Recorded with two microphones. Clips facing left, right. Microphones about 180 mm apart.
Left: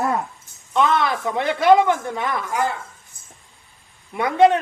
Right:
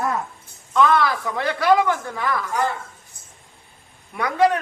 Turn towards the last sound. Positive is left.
turn(degrees=25)  # may be behind; listen again after turning